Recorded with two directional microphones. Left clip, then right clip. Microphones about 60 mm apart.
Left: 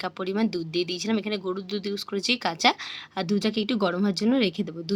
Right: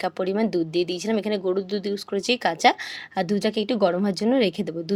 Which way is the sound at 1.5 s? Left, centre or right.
Right.